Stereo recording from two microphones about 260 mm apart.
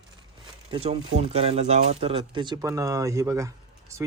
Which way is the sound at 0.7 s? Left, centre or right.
Right.